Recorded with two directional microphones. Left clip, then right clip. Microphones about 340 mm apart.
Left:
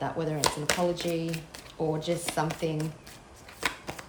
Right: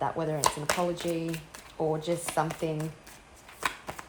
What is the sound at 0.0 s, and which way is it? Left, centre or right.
Speech, centre.